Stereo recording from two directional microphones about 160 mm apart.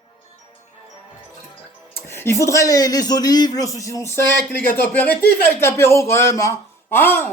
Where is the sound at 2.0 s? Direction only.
15° left (ahead or behind).